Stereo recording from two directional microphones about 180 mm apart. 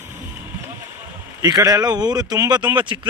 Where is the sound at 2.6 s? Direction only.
10° right (ahead or behind).